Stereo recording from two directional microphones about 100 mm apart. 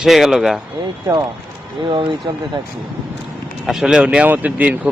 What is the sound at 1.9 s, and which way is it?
Speech, 55° right (ahead or behind).